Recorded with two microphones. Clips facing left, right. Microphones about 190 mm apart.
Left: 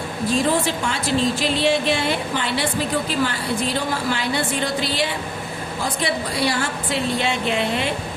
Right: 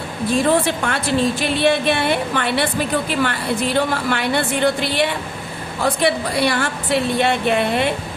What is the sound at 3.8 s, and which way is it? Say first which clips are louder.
A woman's voice: right 4 dB; 60° right (ahead or behind).